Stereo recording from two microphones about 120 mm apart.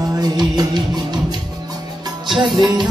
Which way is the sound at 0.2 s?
35° right (ahead or behind).